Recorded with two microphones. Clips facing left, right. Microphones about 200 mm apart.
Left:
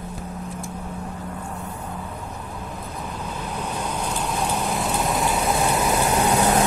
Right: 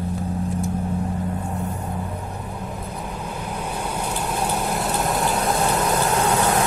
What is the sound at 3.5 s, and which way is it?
Vehicle, 10° right (ahead or behind).